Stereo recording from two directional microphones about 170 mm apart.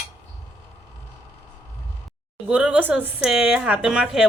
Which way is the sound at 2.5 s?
5° right (ahead or behind).